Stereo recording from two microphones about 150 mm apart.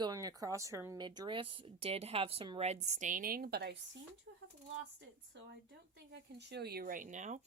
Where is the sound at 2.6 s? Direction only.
50° right (ahead or behind); by 3.7 s 90° right.